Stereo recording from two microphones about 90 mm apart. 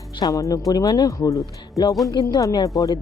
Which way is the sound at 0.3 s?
40° left (ahead or behind).